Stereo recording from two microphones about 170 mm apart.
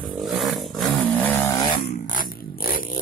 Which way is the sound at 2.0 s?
55° left (ahead or behind).